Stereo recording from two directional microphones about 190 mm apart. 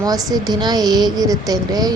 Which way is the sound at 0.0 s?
20° right (ahead or behind).